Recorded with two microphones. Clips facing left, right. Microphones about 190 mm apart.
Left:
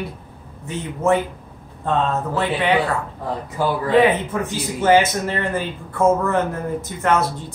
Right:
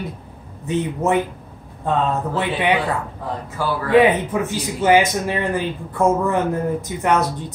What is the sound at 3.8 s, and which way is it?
Speech, 15° right (ahead or behind).